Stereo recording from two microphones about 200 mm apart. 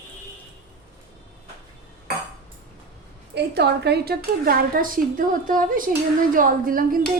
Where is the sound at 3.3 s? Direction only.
55° right (ahead or behind).